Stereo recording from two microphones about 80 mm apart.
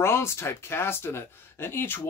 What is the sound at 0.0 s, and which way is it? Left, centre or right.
Speech, left.